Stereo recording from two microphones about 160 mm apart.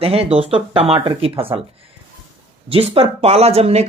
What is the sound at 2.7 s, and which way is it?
Speech, 35° right (ahead or behind).